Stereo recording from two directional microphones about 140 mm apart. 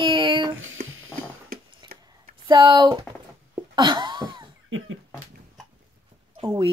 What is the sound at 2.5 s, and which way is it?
Speech, 30° right (ahead or behind).